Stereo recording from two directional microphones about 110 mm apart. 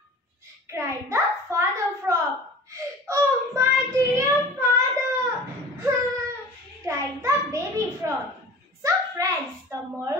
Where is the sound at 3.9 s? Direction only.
30° right (ahead or behind).